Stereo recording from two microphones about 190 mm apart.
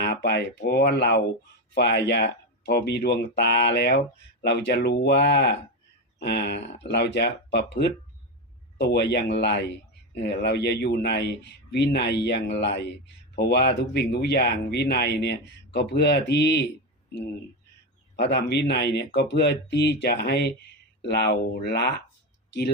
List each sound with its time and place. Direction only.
0.0 s speech: 60° left (ahead or behind)
18.2 s speech: 60° left (ahead or behind)